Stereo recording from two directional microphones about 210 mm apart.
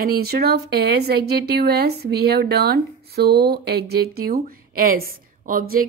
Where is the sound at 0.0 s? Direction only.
45° right (ahead or behind).